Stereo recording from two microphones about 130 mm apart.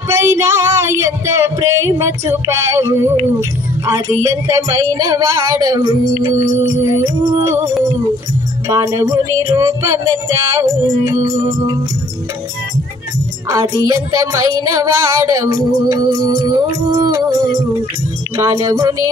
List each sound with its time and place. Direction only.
0.1 s a sound: 20° right (ahead or behind)
3.3 s music: 25° right (ahead or behind)
7.4 s music: 20° right (ahead or behind)
13.5 s music: 25° right (ahead or behind)
16.3 s music: 35° right (ahead or behind)
16.5 s music: 25° right (ahead or behind)
18.4 s music: 30° right (ahead or behind)